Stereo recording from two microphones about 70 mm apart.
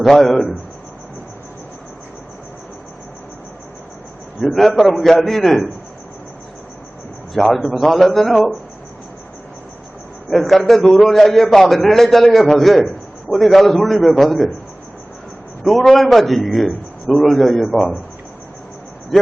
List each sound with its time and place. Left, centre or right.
0.0 s a man's voice: centre
4.4 s a man's voice: centre
7.3 s a man's voice: centre
10.3 s a man's voice: centre
15.6 s a man's voice: centre